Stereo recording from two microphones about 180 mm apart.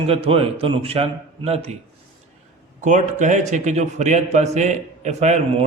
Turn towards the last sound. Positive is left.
turn(degrees=-40)  # may be behind; listen again after turning